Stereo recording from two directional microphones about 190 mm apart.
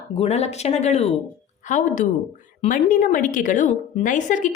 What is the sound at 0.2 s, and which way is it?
A woman's voice, 35° left (ahead or behind).